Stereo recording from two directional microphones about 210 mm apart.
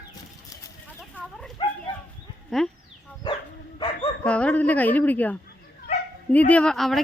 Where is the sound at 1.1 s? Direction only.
Centre (ahead or behind).